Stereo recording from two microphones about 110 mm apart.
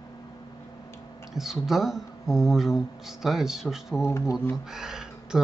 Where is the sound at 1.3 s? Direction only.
5° right (ahead or behind).